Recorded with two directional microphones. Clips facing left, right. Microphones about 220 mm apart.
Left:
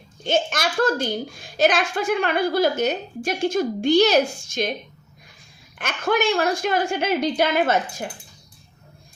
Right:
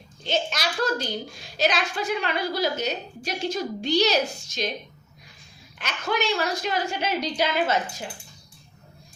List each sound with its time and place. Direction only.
0.3 s a child's voice: 50° left (ahead or behind)
5.8 s a child's voice: 50° left (ahead or behind)